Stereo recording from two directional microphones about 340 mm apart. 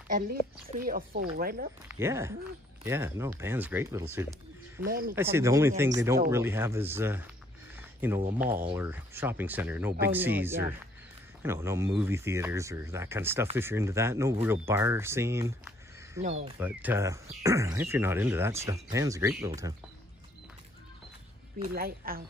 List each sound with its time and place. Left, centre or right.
0.1 s a woman's voice: right
1.9 s speech: centre
4.8 s a woman's voice: right
5.1 s speech: centre
7.7 s a sound: centre
8.4 s speech: centre
16.2 s a woman's voice: centre
16.5 s speech: centre
21.5 s a woman's voice: right